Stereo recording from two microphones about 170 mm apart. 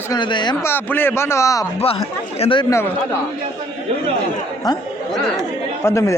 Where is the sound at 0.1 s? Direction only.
30° left (ahead or behind).